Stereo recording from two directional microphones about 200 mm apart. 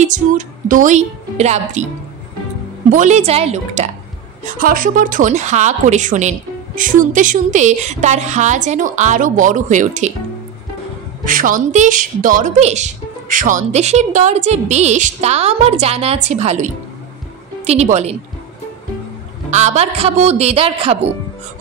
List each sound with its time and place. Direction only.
0.0 s a woman's voice: 40° right (ahead or behind)
2.9 s a woman's voice: 35° right (ahead or behind)
11.2 s a woman's voice: 40° right (ahead or behind)
19.5 s a woman's voice: 35° right (ahead or behind)